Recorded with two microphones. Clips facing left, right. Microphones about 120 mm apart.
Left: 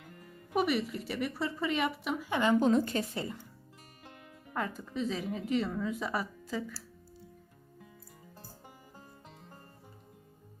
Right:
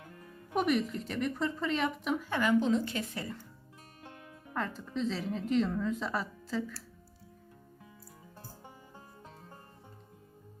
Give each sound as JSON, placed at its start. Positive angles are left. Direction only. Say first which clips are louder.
{"t": 0.5, "sound": "a woman's voice", "louder": "right 1 dB", "side_deg": 5}
{"t": 2.6, "sound": "a woman's voice", "louder": "left 2 dB", "side_deg": 50}
{"t": 3.2, "sound": "speech", "louder": "left 2 dB", "side_deg": 20}
{"t": 4.5, "sound": "a woman's voice", "louder": "even", "side_deg": 10}